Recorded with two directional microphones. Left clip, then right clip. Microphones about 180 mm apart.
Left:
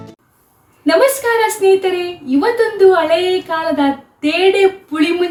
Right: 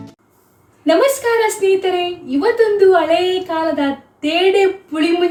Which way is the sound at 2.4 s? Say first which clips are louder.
Even; 15° left (ahead or behind).